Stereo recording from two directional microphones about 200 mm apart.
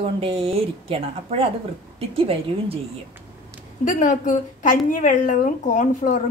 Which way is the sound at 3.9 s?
40° left (ahead or behind).